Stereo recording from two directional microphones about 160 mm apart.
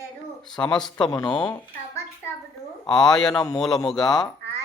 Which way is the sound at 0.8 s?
5° left (ahead or behind).